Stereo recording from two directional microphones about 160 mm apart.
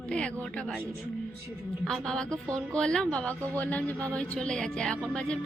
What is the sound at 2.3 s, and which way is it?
Music, 20° right (ahead or behind).